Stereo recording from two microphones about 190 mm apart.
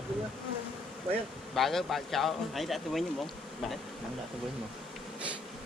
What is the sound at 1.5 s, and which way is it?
Speech, centre (ahead or behind).